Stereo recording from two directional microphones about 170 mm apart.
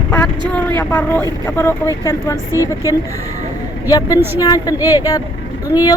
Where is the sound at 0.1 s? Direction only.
10° left (ahead or behind).